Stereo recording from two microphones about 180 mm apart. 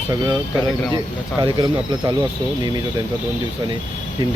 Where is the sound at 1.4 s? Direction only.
25° right (ahead or behind).